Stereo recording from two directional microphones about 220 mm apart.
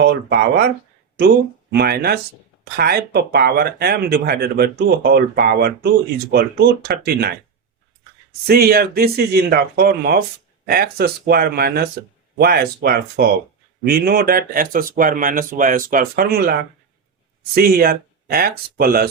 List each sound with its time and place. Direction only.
0.0 s speech: 50° right (ahead or behind)
1.7 s speech: 45° right (ahead or behind)
8.4 s speech: 45° right (ahead or behind)